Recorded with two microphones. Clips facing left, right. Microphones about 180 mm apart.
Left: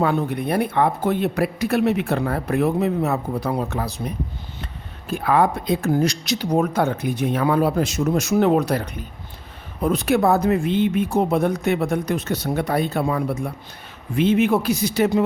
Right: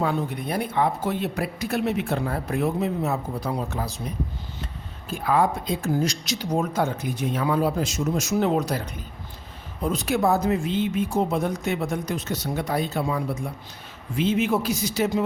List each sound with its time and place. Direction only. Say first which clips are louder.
0.0 s speech: left 5 dB; 60° left (ahead or behind)